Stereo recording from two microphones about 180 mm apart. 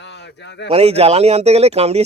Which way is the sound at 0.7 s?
35° right (ahead or behind).